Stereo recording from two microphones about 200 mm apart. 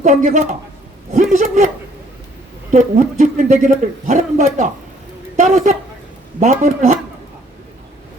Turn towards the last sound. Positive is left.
turn(degrees=-35)  # may be behind; listen again after turning